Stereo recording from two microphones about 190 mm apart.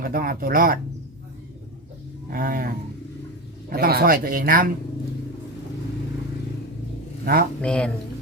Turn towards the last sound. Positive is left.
turn(degrees=5)  # may be behind; listen again after turning